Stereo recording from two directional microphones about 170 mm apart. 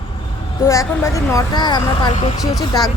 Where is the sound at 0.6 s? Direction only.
15° left (ahead or behind).